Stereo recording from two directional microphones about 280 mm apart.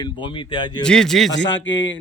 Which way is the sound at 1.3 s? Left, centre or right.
Left.